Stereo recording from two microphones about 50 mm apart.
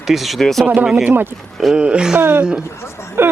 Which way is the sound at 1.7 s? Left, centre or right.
Centre.